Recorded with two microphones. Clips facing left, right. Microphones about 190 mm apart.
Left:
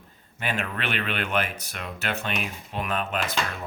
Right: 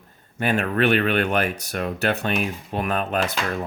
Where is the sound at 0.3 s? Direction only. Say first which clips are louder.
Right 9 dB; 45° right (ahead or behind).